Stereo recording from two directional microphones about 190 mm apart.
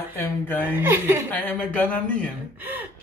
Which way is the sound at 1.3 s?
10° left (ahead or behind).